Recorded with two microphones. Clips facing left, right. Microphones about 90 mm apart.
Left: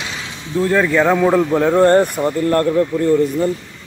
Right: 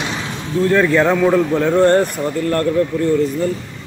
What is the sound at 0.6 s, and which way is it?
A man's voice, 5° left (ahead or behind).